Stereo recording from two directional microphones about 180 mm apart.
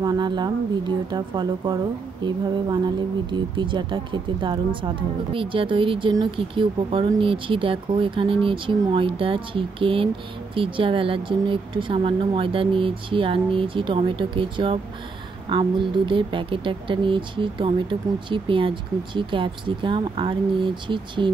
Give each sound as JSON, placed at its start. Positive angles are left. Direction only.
{"t": 0.0, "sound": "speech", "side_deg": -25}
{"t": 3.3, "sound": "speech", "side_deg": -25}